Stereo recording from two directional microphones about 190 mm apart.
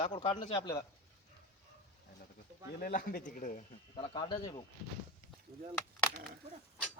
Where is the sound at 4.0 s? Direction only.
25° left (ahead or behind).